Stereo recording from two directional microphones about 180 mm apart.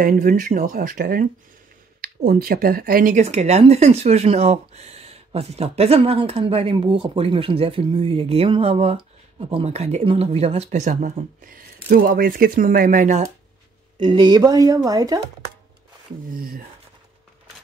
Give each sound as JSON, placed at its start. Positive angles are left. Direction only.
{"t": 0.0, "sound": "speech", "side_deg": -50}
{"t": 13.9, "sound": "a woman's voice", "side_deg": -25}
{"t": 16.3, "sound": "speech", "side_deg": -55}